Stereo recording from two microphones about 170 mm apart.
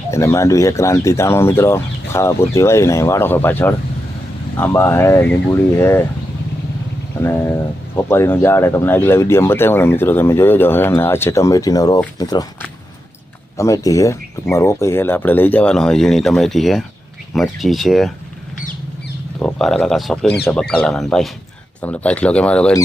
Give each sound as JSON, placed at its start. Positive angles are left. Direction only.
{"t": 0.1, "sound": "speech", "side_deg": 15}
{"t": 7.2, "sound": "speech", "side_deg": 15}
{"t": 13.6, "sound": "speech", "side_deg": 20}
{"t": 19.4, "sound": "speech", "side_deg": 5}